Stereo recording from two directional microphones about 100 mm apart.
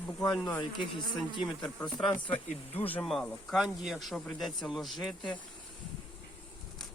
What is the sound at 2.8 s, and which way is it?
Speech, 15° left (ahead or behind).